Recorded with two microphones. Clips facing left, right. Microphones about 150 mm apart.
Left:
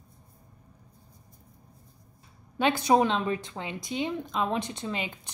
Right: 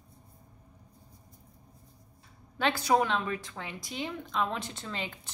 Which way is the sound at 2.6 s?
20° left (ahead or behind).